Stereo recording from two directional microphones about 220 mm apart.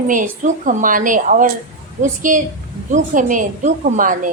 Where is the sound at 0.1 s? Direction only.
35° right (ahead or behind).